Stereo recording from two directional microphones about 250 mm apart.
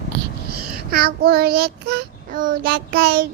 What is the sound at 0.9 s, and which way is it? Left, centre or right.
Child singing, right.